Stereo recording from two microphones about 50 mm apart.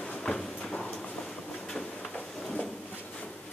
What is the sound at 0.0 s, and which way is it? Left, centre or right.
Clip-clop, centre.